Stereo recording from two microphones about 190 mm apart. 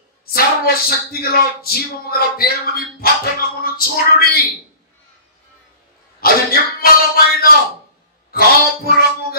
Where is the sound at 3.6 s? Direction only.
50° left (ahead or behind).